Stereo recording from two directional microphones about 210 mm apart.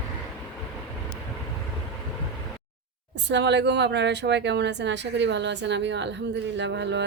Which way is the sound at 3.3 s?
55° right (ahead or behind).